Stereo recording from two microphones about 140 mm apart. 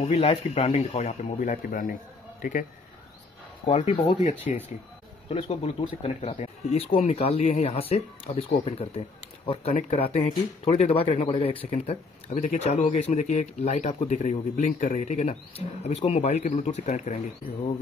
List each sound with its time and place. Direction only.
0.0 s speech: 50° left (ahead or behind)
1.6 s a man's voice: 80° left
3.7 s speech: 50° left (ahead or behind)
5.3 s speech: 45° left (ahead or behind)